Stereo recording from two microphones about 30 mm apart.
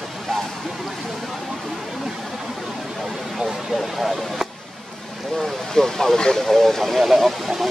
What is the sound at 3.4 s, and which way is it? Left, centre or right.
Speech, centre.